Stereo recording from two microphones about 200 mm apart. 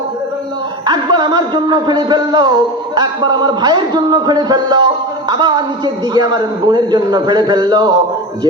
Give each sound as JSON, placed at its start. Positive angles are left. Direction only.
{"t": 0.9, "sound": "a man's voice", "side_deg": -20}